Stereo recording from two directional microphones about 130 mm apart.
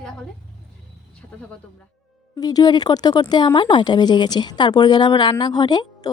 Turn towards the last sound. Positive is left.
turn(degrees=30)  # may be behind; listen again after turning